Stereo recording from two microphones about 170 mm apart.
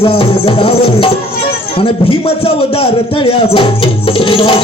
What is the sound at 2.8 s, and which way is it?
Music, 35° left (ahead or behind).